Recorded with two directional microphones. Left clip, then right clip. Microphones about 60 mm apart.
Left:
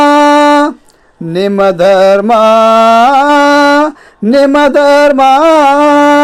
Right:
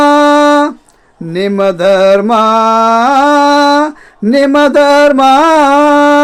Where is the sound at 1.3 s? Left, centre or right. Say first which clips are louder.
Left 2 dB; left.